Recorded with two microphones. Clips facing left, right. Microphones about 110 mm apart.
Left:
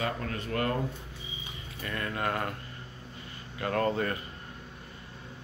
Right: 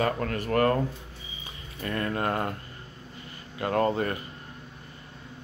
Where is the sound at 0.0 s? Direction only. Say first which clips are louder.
Right 6 dB; 50° right (ahead or behind).